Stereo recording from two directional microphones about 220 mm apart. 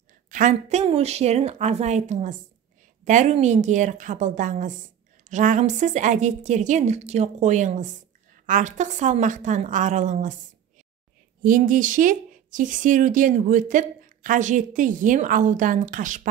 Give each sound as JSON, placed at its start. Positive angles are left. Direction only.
{"t": 0.3, "sound": "speech", "side_deg": -35}
{"t": 11.4, "sound": "speech", "side_deg": -40}